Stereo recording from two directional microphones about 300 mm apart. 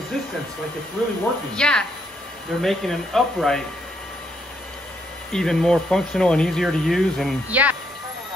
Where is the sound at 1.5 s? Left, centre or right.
Centre.